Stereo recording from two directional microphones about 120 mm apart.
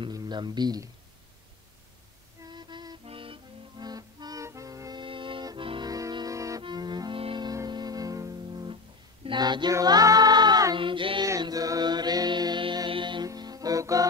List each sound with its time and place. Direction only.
0.0 s speech: 35° right (ahead or behind)
2.4 s music: 40° right (ahead or behind)
3.1 s music: 50° right (ahead or behind); by 5.0 s 30° right (ahead or behind)
5.0 s music: 45° right (ahead or behind); by 6.6 s 25° right (ahead or behind)
6.6 s music: 40° right (ahead or behind)
7.4 s music: 35° right (ahead or behind)
9.2 s a sound: 40° right (ahead or behind)
9.8 s female singing: 30° right (ahead or behind)
11.2 s music: 30° right (ahead or behind)